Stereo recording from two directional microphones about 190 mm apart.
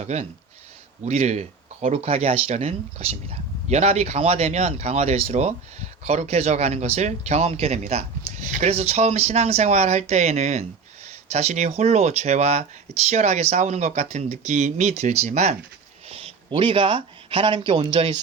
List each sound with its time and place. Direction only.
0.0 s speech: 35° right (ahead or behind)